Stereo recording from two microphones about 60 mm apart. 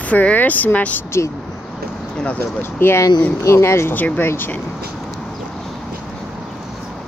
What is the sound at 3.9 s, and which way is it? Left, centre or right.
Speech, left.